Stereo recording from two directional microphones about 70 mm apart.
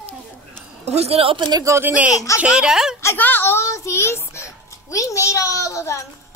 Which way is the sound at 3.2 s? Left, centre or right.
Left.